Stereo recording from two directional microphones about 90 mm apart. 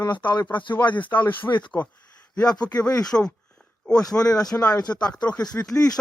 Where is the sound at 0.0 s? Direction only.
20° left (ahead or behind).